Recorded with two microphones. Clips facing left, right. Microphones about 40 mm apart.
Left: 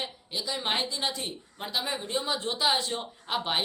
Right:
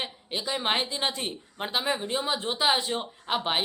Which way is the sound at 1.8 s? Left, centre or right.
Centre.